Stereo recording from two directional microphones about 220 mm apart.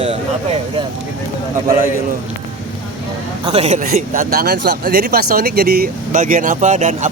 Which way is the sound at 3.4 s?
30° right (ahead or behind).